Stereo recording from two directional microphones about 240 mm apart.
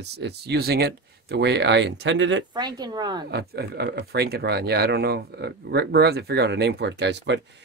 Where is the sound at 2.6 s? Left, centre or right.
Centre.